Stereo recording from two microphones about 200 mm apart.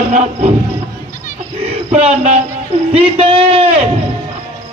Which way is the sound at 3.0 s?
30° right (ahead or behind).